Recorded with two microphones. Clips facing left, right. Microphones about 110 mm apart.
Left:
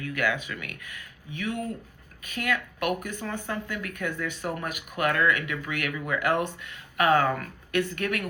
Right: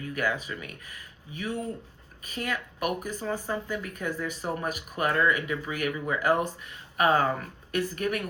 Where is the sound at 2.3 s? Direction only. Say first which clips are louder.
Left 3 dB; 70° left (ahead or behind).